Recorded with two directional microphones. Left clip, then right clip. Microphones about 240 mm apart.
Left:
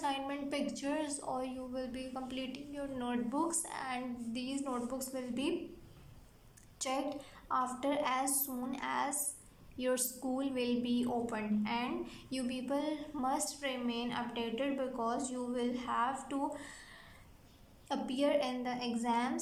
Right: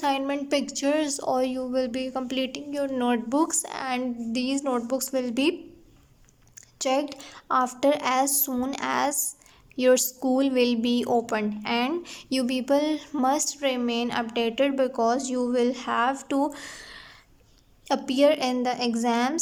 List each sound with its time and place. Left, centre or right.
0.0 s a woman's voice: right
6.7 s a woman's voice: right